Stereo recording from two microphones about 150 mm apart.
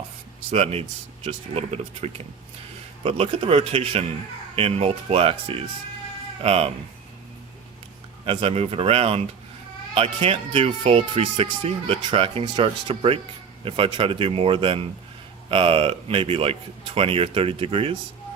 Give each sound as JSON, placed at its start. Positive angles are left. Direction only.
{"t": 0.5, "sound": "speech", "side_deg": -45}
{"t": 8.2, "sound": "speech", "side_deg": -35}